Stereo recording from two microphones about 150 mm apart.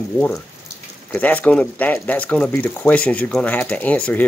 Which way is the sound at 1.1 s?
10° left (ahead or behind).